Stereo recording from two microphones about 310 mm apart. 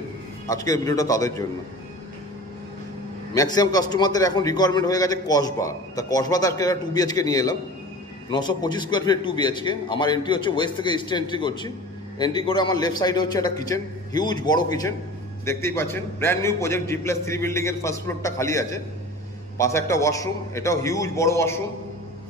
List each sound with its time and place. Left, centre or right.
0.5 s a man's voice: centre
3.3 s a man's voice: centre